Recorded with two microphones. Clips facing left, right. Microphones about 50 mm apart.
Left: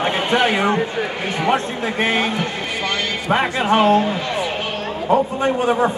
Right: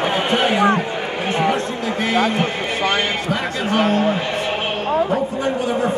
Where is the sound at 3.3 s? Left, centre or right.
Left.